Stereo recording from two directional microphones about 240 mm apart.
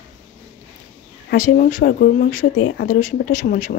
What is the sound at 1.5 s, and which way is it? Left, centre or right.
Speech, left.